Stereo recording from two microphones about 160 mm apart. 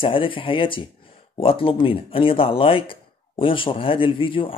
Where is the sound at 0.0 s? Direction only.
35° left (ahead or behind).